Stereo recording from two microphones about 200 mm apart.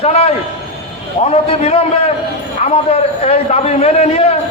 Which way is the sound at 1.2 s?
35° left (ahead or behind).